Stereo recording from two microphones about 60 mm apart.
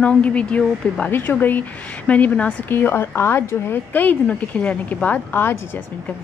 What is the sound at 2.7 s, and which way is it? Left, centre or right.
Speech, left.